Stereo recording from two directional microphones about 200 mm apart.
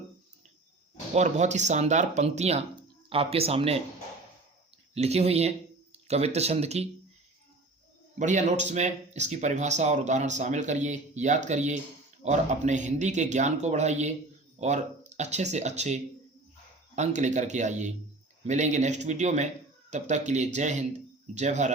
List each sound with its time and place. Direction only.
1.1 s speech: 35° right (ahead or behind)
4.9 s speech: 30° right (ahead or behind)
8.2 s speech: 35° right (ahead or behind)